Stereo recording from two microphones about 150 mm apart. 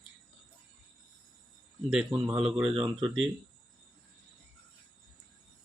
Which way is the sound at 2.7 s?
30° right (ahead or behind).